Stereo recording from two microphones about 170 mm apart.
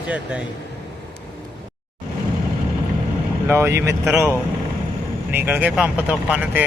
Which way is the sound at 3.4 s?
15° right (ahead or behind).